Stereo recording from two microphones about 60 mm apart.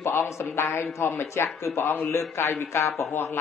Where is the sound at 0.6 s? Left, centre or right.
Left.